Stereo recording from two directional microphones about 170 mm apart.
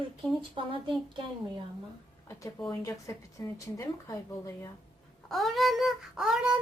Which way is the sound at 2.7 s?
20° left (ahead or behind).